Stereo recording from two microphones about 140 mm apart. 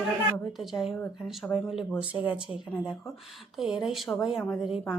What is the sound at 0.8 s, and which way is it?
A woman's voice, centre (ahead or behind).